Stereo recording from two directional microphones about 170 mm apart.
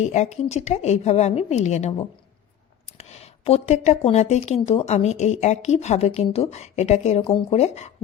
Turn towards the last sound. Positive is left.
turn(degrees=40)  # may be behind; listen again after turning